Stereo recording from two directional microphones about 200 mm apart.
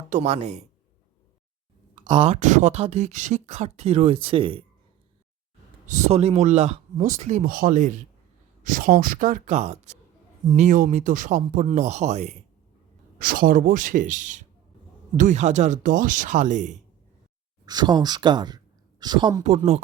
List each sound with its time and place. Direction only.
0.1 s speech: 35° right (ahead or behind)
2.0 s speech: 30° right (ahead or behind)
5.9 s speech: 35° right (ahead or behind)
13.1 s speech: 45° right (ahead or behind)
17.7 s speech: 20° right (ahead or behind)